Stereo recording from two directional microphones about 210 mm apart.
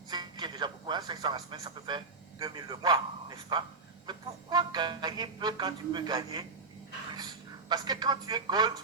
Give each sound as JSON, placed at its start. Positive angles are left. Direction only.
{"t": 0.1, "sound": "music", "side_deg": -20}
{"t": 2.4, "sound": "speech", "side_deg": -20}